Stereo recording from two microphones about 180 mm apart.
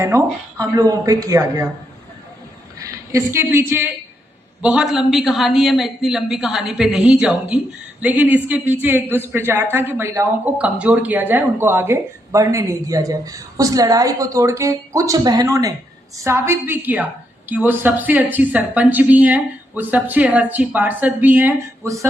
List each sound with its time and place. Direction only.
0.0 s a woman's voice: 15° right (ahead or behind)
2.7 s a woman's voice: 15° right (ahead or behind)